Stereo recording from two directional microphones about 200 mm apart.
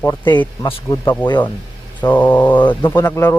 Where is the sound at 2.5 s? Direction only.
25° left (ahead or behind).